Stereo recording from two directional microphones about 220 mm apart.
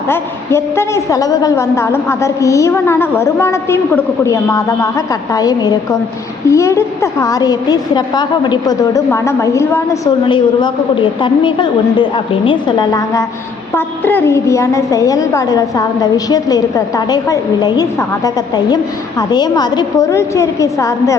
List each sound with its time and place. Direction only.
0.1 s a woman's voice: 10° left (ahead or behind)